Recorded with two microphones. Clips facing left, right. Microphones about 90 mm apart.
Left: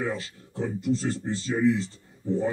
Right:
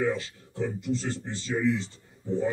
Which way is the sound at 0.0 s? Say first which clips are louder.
Right 3 dB; 40° left (ahead or behind).